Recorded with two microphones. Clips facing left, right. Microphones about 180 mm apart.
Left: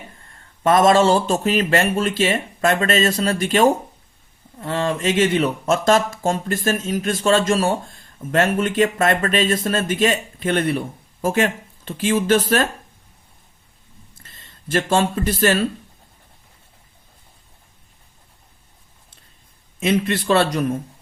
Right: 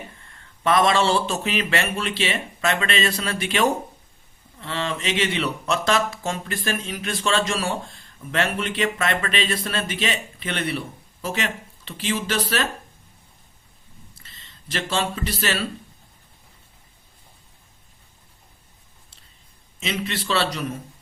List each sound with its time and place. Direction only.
0.6 s speech: 45° left (ahead or behind)
14.2 s speech: 50° left (ahead or behind)
19.8 s speech: 50° left (ahead or behind)